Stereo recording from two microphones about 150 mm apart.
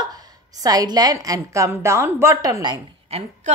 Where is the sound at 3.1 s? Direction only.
45° right (ahead or behind).